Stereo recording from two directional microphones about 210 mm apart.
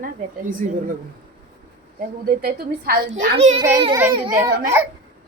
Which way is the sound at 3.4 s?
30° right (ahead or behind).